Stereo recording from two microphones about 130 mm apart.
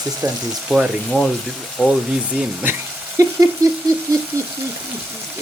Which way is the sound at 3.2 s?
25° right (ahead or behind).